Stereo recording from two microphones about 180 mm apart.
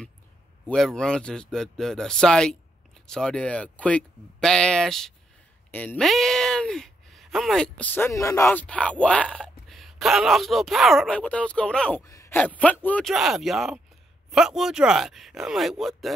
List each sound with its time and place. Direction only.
0.7 s speech: 5° left (ahead or behind)
12.0 s speech: 15° left (ahead or behind); by 16.1 s centre (ahead or behind)